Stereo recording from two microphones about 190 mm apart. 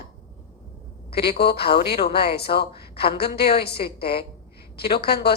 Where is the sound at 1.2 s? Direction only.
60° left (ahead or behind).